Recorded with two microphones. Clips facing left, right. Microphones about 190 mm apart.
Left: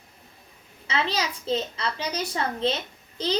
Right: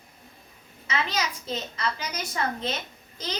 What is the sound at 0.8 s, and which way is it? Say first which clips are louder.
A child's voice: left 2 dB; 30° left (ahead or behind).